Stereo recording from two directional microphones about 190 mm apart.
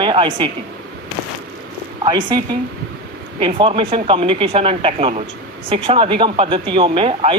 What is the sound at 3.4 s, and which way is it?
Speech, 25° right (ahead or behind).